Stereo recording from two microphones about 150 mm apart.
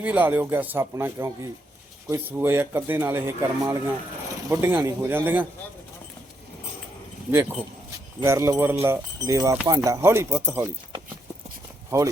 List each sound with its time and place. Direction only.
0.0 s speech: 10° right (ahead or behind)
8.2 s speech: 20° right (ahead or behind)
11.9 s speech: 20° right (ahead or behind)